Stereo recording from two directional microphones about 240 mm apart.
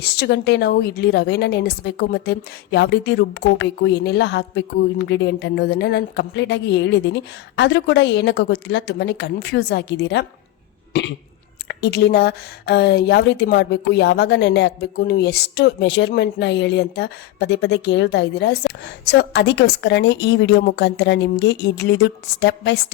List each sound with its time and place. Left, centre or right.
0.0 s speech: left
11.7 s speech: left